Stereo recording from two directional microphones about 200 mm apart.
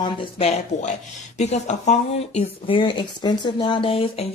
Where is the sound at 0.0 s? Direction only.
25° left (ahead or behind).